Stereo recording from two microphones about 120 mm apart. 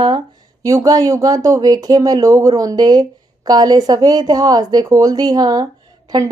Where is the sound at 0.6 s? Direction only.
30° right (ahead or behind).